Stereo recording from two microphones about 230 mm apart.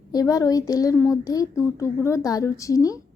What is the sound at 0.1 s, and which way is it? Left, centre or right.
A woman's voice, centre.